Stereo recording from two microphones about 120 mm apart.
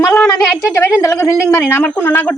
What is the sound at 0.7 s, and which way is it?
A woman's voice, 25° left (ahead or behind).